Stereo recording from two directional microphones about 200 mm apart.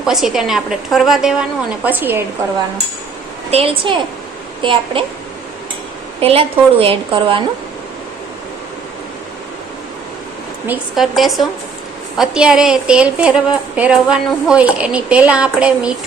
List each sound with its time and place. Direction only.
0.0 s a woman's voice: centre (ahead or behind)
3.5 s a woman's voice: 30° right (ahead or behind)
6.1 s a woman's voice: 30° right (ahead or behind)
10.7 s a woman's voice: centre (ahead or behind)